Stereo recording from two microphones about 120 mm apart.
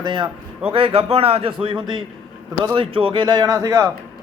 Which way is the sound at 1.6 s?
40° right (ahead or behind).